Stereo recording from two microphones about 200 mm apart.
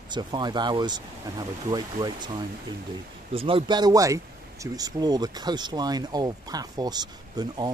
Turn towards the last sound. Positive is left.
turn(degrees=-20)  # may be behind; listen again after turning